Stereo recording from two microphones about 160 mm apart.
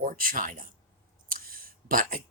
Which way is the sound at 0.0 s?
60° right (ahead or behind).